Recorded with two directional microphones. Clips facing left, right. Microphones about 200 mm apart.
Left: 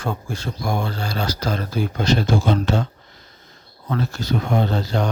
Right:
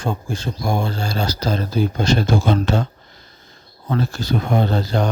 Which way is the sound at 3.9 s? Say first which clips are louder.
Right 2 dB; 30° right (ahead or behind).